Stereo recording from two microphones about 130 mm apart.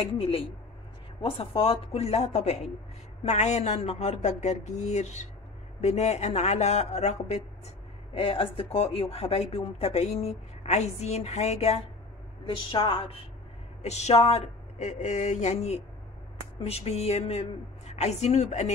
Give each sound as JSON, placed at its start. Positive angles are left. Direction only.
{"t": 0.0, "sound": "speech", "side_deg": 50}
{"t": 12.4, "sound": "a woman's voice", "side_deg": 40}
{"t": 13.8, "sound": "speech", "side_deg": 55}